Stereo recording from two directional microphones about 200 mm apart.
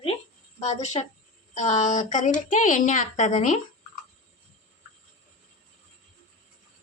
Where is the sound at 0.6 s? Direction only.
35° left (ahead or behind).